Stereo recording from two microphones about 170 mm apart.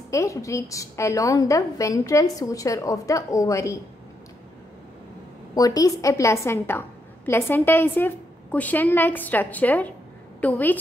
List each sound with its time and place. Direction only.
0.1 s a woman's voice: 20° left (ahead or behind)
5.5 s a woman's voice: 20° left (ahead or behind)